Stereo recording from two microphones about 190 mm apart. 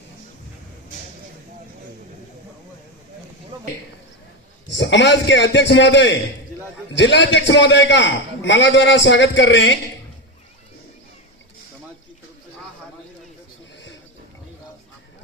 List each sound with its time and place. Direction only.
4.7 s a man's voice: 70° left (ahead or behind)